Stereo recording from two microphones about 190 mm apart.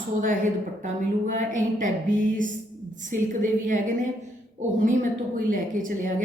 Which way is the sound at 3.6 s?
45° right (ahead or behind).